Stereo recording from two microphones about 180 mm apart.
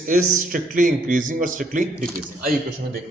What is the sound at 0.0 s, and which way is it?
Speech, 50° right (ahead or behind).